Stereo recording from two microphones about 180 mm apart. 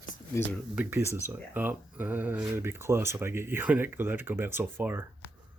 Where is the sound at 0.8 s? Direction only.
10° right (ahead or behind).